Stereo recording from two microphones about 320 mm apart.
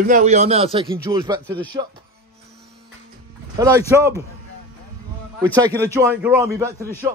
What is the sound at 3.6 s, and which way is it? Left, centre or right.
Speech, centre.